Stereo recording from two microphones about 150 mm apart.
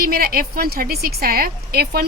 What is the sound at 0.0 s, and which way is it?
A woman's voice, 90° right.